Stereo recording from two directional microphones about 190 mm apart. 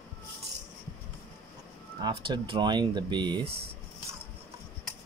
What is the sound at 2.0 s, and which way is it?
Speech, 25° right (ahead or behind).